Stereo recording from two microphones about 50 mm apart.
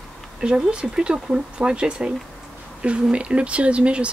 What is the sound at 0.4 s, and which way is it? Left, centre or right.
Speech, centre.